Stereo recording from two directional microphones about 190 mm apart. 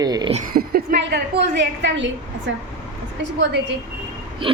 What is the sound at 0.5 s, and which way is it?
A woman's voice, 50° right (ahead or behind).